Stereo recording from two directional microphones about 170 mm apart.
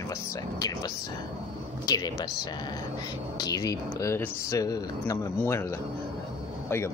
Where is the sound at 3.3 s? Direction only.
20° left (ahead or behind).